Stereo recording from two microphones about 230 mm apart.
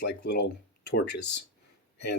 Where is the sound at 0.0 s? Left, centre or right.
Left.